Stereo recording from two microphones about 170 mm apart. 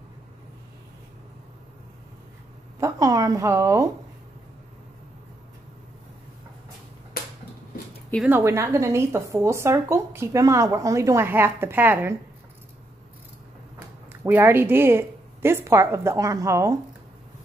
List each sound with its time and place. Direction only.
2.8 s a woman's voice: 20° right (ahead or behind)
7.2 s a sound: 60° left (ahead or behind)
8.3 s speech: 15° right (ahead or behind)
14.0 s speech: 10° right (ahead or behind)